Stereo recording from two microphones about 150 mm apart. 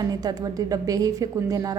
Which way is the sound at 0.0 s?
25° right (ahead or behind).